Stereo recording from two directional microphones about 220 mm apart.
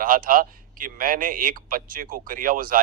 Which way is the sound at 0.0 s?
40° right (ahead or behind).